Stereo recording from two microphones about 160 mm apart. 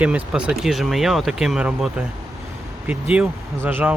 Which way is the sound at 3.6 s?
15° right (ahead or behind).